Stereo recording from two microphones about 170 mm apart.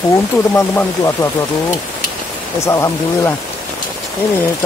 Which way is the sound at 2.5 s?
15° left (ahead or behind).